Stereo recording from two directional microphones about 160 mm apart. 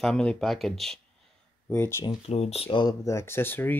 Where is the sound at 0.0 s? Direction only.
5° left (ahead or behind).